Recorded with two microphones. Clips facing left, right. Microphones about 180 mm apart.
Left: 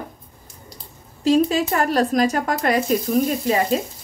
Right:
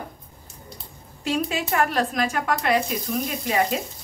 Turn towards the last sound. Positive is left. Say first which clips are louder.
# left 4 dB
turn(degrees=35)  # may be behind; listen again after turning